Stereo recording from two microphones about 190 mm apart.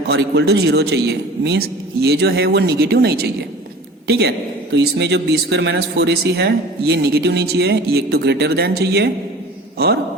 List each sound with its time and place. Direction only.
0.1 s speech: 60° right (ahead or behind)